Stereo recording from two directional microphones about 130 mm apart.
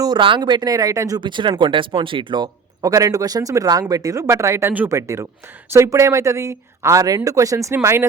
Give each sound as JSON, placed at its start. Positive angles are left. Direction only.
{"t": 0.0, "sound": "speech", "side_deg": -35}